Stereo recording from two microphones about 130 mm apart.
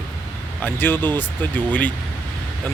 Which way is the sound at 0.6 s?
15° left (ahead or behind).